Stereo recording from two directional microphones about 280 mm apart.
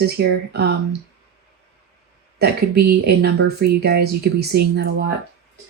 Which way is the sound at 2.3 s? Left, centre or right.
Right.